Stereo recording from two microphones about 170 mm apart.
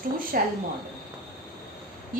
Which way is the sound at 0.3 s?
60° right (ahead or behind).